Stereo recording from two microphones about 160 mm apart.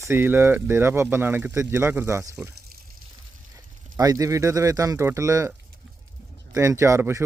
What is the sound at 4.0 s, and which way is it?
Speech, 20° right (ahead or behind).